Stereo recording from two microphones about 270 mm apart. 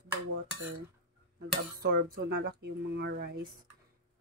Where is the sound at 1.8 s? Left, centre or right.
Right.